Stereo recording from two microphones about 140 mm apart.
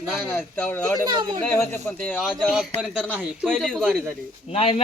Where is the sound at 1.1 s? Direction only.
35° right (ahead or behind).